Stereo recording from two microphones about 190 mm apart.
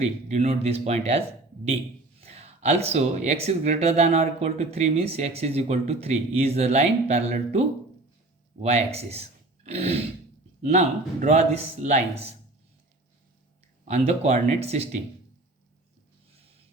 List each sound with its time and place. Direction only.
0.0 s speech: 35° right (ahead or behind)
2.2 s speech: 35° right (ahead or behind)
8.6 s speech: 35° right (ahead or behind)
13.8 s speech: 35° right (ahead or behind)